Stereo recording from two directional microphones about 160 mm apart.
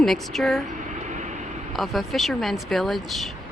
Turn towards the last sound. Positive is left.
turn(degrees=0)  # may be behind; listen again after turning